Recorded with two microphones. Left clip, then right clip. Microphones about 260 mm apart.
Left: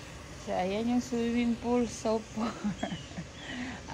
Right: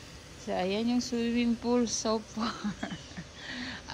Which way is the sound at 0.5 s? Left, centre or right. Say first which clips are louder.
Even; centre.